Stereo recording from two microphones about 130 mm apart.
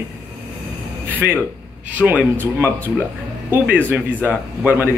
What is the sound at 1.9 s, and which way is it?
Speech, 10° right (ahead or behind).